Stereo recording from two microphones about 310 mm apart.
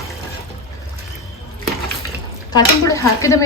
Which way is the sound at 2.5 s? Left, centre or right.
Centre.